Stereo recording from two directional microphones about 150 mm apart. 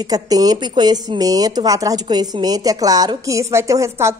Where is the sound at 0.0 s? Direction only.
25° right (ahead or behind).